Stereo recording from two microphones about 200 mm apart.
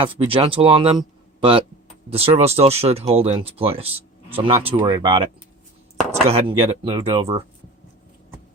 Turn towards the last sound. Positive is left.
turn(degrees=-30)  # may be behind; listen again after turning